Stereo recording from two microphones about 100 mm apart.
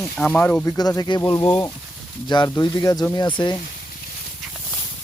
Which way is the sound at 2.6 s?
40° left (ahead or behind).